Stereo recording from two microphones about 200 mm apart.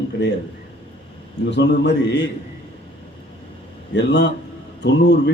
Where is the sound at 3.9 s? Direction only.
60° left (ahead or behind).